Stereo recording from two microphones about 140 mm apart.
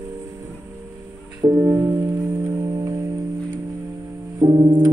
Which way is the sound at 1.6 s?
20° right (ahead or behind).